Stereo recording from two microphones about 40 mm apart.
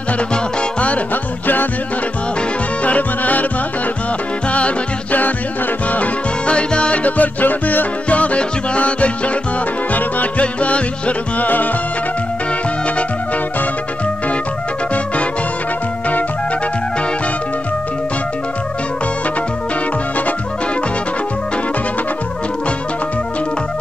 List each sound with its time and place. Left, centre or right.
0.3 s music: left
2.8 s music: left
4.5 s music: left
6.5 s music: left
8.1 s music: left
9.9 s music: left
10.4 s music: left
11.4 s music: left